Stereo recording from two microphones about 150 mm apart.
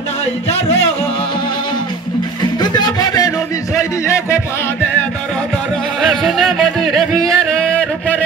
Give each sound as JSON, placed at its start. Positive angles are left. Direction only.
{"t": 0.5, "sound": "music", "side_deg": 45}
{"t": 2.6, "sound": "music", "side_deg": 25}
{"t": 5.9, "sound": "music", "side_deg": 0}